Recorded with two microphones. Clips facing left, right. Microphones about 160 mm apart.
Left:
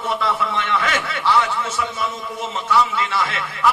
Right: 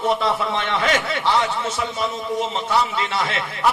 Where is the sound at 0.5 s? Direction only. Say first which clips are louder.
Right 1 dB; 35° right (ahead or behind).